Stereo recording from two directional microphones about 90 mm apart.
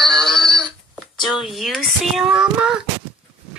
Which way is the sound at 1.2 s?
5° right (ahead or behind).